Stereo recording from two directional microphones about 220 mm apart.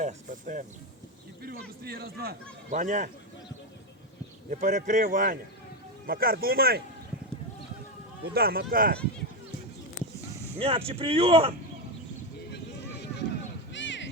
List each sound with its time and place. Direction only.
0.0 s speech: 35° right (ahead or behind)
1.8 s a man's voice: 45° right (ahead or behind)
4.4 s a man's voice: 35° right (ahead or behind)
8.2 s a man's voice: 45° right (ahead or behind)
10.6 s speech: 25° right (ahead or behind)
12.4 s a sound: 50° left (ahead or behind)